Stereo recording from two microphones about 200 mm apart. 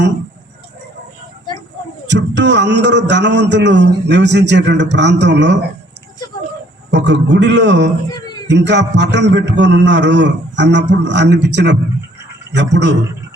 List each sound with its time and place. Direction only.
2.0 s a man's voice: 60° right (ahead or behind)
6.9 s a man's voice: 60° right (ahead or behind)